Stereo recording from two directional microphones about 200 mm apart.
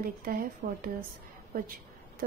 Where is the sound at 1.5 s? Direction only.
45° right (ahead or behind).